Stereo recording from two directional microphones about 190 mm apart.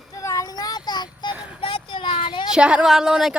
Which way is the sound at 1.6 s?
25° left (ahead or behind).